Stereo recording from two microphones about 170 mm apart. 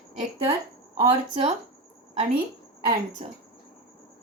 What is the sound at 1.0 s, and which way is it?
Speech, 35° right (ahead or behind).